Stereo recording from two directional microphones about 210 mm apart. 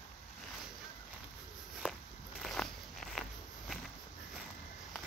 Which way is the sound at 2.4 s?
Centre (ahead or behind).